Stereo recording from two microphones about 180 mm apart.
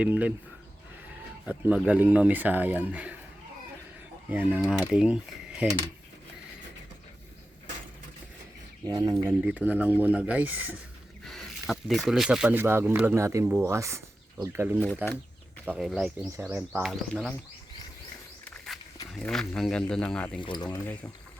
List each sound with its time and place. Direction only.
0.0 s speech: 10° right (ahead or behind)
1.5 s speech: 5° right (ahead or behind)
4.3 s speech: 10° right (ahead or behind)
8.9 s speech: 25° right (ahead or behind)
9.2 s speech: 5° right (ahead or behind)
18.4 s a sound: 5° left (ahead or behind)
19.1 s speech: 5° left (ahead or behind)
20.3 s speech: 25° left (ahead or behind)
20.7 s speech: 10° left (ahead or behind)